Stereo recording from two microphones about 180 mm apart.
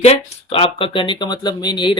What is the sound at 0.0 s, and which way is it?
Speech, 35° left (ahead or behind).